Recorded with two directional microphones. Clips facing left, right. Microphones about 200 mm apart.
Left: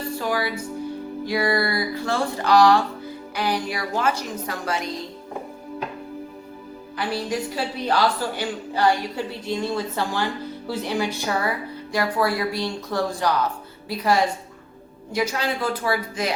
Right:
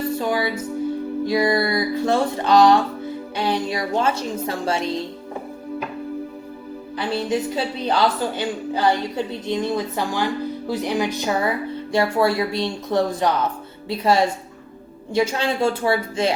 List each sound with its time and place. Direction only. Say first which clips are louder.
0.2 s music: right 3 dB; 20° right (ahead or behind)
1.2 s speech: right 3 dB; 20° right (ahead or behind)
7.0 s a woman's voice: right 3 dB; 25° right (ahead or behind)